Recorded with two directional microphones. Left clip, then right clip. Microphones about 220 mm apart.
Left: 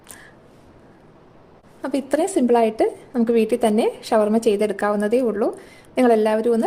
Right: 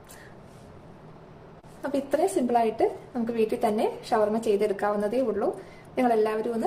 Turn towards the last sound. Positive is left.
turn(degrees=45)  # may be behind; listen again after turning